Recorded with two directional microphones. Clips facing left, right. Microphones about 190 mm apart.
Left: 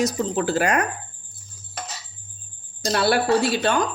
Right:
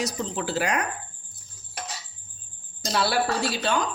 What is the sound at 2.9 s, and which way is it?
Speech, 55° left (ahead or behind).